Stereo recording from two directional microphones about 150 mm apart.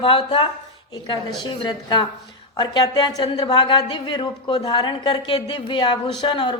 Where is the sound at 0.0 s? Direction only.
35° left (ahead or behind).